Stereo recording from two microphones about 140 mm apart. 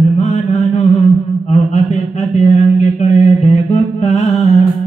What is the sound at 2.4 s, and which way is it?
Mantra, 55° left (ahead or behind).